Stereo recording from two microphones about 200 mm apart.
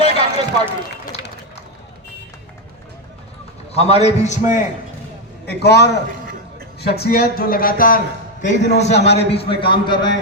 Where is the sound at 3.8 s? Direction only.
30° left (ahead or behind).